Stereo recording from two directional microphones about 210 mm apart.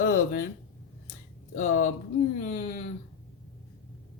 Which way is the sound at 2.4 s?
40° left (ahead or behind).